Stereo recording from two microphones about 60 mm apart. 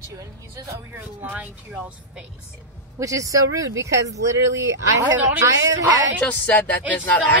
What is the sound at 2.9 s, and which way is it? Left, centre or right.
Speech, right.